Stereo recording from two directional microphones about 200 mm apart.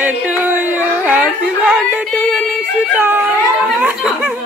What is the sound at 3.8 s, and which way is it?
Laughter, 5° right (ahead or behind).